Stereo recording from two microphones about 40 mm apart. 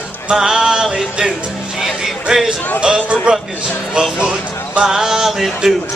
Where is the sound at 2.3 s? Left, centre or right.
Right.